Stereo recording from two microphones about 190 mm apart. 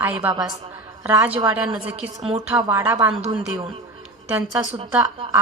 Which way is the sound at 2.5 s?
20° right (ahead or behind).